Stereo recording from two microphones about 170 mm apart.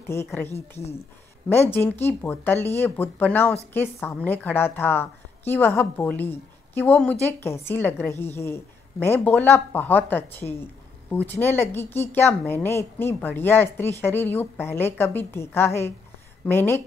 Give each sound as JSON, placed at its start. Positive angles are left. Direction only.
{"t": 0.1, "sound": "a woman's voice", "side_deg": 15}
{"t": 0.5, "sound": "speech", "side_deg": 40}
{"t": 1.5, "sound": "a woman's voice", "side_deg": 15}